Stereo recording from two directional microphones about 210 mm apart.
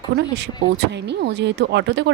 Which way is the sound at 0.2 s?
55° right (ahead or behind).